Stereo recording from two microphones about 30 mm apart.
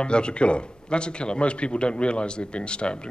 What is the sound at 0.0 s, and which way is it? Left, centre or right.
Speech, left.